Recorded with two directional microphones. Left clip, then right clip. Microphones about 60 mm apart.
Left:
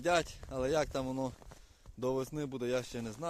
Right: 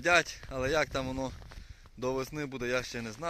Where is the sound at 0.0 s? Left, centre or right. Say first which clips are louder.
Right 5 dB; centre.